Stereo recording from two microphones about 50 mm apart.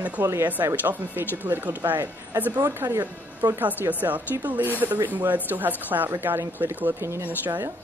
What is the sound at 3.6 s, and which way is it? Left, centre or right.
Speech, right.